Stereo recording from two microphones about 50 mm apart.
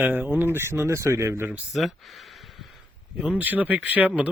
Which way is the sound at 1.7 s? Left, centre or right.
Centre.